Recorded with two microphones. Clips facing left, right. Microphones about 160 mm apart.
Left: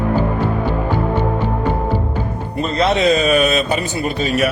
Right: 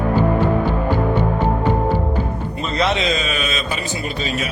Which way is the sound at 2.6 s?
45° left (ahead or behind).